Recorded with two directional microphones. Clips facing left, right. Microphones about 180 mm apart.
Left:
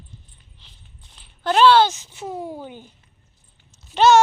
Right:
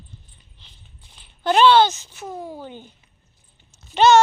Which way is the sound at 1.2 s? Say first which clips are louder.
Even; centre (ahead or behind).